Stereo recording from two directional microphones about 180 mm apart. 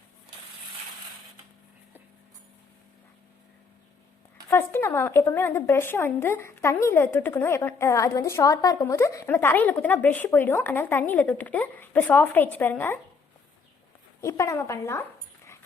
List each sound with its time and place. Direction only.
4.4 s a woman's voice: 15° left (ahead or behind)
14.2 s a woman's voice: 15° left (ahead or behind)